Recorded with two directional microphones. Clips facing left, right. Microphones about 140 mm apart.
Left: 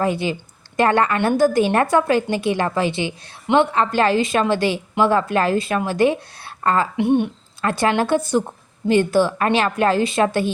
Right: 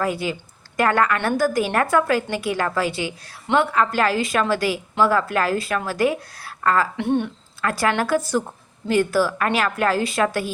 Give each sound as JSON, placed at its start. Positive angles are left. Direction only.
{"t": 0.0, "sound": "a woman's voice", "side_deg": 25}